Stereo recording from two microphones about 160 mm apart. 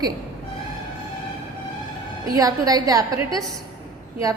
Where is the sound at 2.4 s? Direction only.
20° right (ahead or behind).